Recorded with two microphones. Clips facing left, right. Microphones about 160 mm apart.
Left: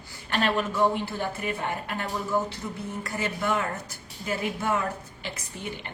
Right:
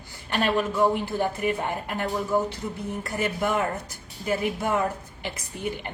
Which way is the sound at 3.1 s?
15° right (ahead or behind).